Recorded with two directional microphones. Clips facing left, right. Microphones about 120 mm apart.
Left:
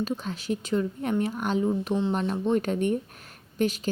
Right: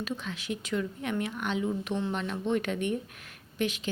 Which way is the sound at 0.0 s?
35° left (ahead or behind).